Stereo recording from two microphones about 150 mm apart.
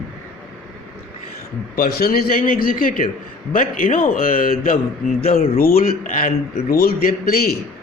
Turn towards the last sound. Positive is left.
turn(degrees=85)